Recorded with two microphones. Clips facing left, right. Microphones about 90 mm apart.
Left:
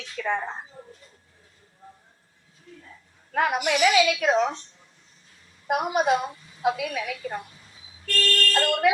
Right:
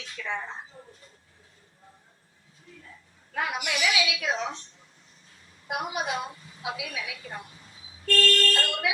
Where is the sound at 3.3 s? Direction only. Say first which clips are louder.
Left 7 dB; 50° left (ahead or behind).